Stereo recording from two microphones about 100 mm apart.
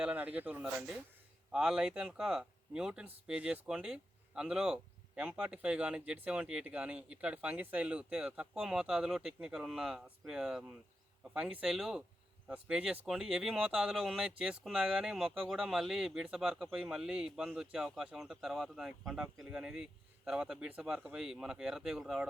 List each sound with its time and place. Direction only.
0.0 s a man's voice: 15° right (ahead or behind)